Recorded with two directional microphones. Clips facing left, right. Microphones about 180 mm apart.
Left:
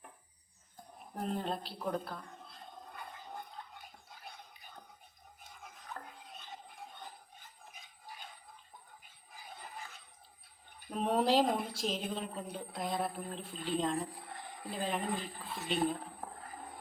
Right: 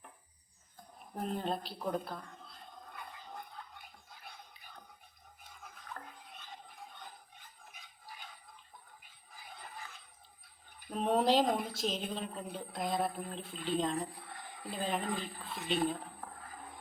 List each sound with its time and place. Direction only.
0.9 s speech: centre (ahead or behind)
10.9 s speech: centre (ahead or behind)
16.2 s music: 20° left (ahead or behind)